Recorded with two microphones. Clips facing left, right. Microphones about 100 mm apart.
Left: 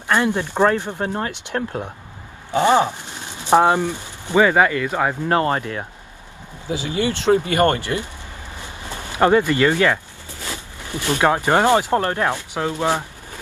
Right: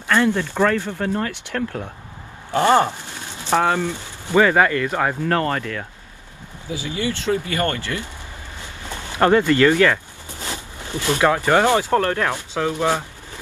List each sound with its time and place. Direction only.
0.1 s speech: 20° left (ahead or behind)
9.1 s speech: 15° left (ahead or behind)
10.4 s a sound: 20° right (ahead or behind)
11.1 s speech: 20° left (ahead or behind)